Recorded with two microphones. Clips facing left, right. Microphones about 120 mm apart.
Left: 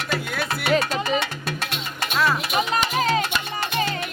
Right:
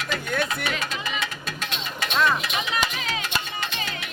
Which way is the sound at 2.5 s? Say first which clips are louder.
Left 5 dB; 40° left (ahead or behind).